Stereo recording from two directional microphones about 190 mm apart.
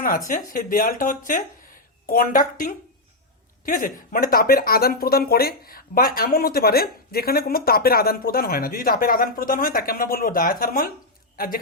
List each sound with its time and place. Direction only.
0.3 s a man's voice: 45° left (ahead or behind)